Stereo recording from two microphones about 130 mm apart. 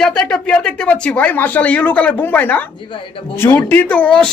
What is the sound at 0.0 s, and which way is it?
Speech, 5° left (ahead or behind).